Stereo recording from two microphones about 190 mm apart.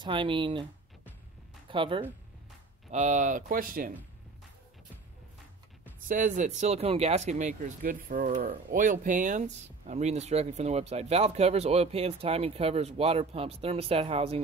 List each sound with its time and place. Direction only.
0.0 s speech: 25° right (ahead or behind)
1.7 s speech: 25° right (ahead or behind)
2.9 s speech: 40° right (ahead or behind)
6.0 s speech: 45° right (ahead or behind)